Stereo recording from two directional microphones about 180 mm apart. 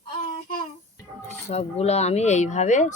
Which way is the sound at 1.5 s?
35° left (ahead or behind).